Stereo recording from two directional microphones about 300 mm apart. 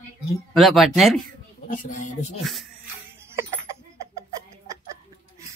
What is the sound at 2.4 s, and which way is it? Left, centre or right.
Speech, centre.